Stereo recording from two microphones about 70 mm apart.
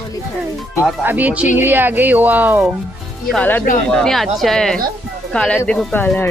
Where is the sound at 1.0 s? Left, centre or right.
Right.